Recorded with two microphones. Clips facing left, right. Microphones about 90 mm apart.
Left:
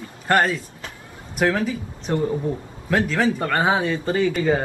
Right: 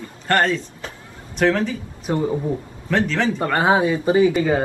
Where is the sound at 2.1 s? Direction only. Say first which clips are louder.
Right 1 dB; 10° right (ahead or behind).